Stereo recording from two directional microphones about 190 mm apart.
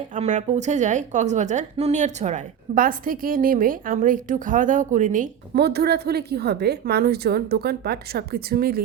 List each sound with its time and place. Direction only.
0.1 s a woman's voice: 40° right (ahead or behind)
5.5 s a woman's voice: 60° right (ahead or behind)